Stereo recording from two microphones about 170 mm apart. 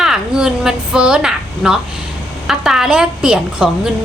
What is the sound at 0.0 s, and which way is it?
A woman's voice, 5° right (ahead or behind).